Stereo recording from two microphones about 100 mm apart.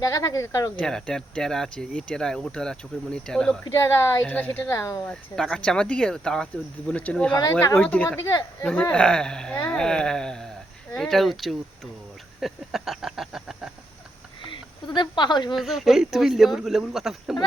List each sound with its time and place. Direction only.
0.0 s speech: 35° left (ahead or behind)
0.8 s speech: 5° left (ahead or behind)
3.6 s speech: 30° left (ahead or behind)
4.2 s speech: 15° left (ahead or behind)
4.7 s speech: 30° left (ahead or behind)
5.4 s speech: 5° left (ahead or behind)
8.2 s speech: 40° left (ahead or behind)
8.6 s speech: 15° left (ahead or behind); by 13.7 s 5° right (ahead or behind)
14.5 s speech: 50° left (ahead or behind)
15.5 s speech: centre (ahead or behind)